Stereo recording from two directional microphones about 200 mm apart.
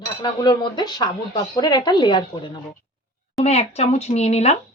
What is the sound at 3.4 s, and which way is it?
Speech, 35° left (ahead or behind).